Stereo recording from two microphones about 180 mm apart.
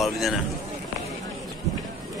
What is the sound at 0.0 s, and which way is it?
Speech, centre (ahead or behind).